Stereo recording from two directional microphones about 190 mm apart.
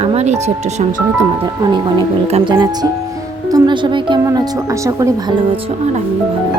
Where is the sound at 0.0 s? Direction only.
35° right (ahead or behind); by 5.1 s 15° right (ahead or behind).